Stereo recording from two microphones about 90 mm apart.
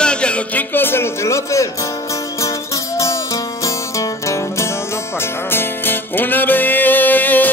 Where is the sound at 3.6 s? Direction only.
35° left (ahead or behind).